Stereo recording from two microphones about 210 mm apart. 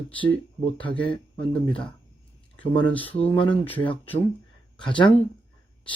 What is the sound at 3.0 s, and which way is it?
Speech, 25° left (ahead or behind).